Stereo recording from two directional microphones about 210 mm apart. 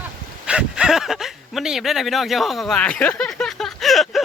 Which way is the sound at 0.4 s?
5° right (ahead or behind).